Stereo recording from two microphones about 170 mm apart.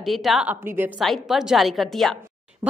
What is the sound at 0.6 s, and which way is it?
Speech, 15° right (ahead or behind).